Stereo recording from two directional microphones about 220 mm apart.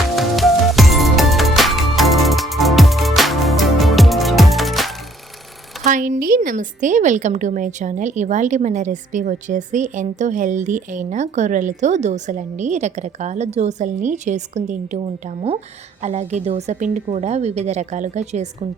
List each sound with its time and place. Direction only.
0.2 s music: centre (ahead or behind)
5.9 s a woman's voice: 40° right (ahead or behind)